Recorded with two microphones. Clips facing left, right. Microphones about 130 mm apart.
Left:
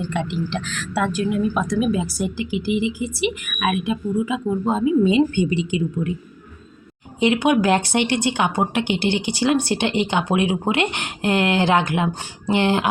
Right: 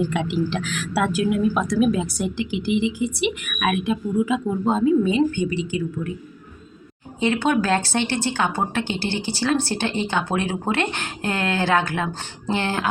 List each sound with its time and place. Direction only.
0.0 s speech: 5° right (ahead or behind)
5.0 s speech: 20° left (ahead or behind)
7.2 s speech: 15° left (ahead or behind)